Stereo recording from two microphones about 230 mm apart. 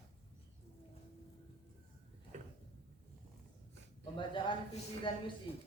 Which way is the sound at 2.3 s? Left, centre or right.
Right.